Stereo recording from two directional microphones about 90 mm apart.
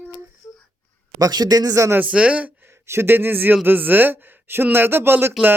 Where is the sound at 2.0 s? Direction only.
15° right (ahead or behind).